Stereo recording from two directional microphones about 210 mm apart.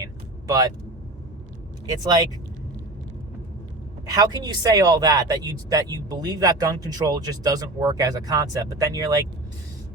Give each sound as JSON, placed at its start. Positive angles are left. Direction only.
{"t": 0.0, "sound": "vehicle", "side_deg": -15}
{"t": 1.9, "sound": "speech", "side_deg": -15}
{"t": 4.1, "sound": "speech", "side_deg": -20}